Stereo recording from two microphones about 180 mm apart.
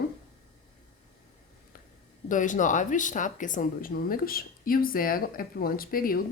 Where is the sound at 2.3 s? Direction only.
45° left (ahead or behind).